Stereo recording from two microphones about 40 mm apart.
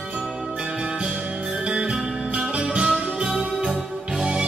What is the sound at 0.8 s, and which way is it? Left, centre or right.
Music, right.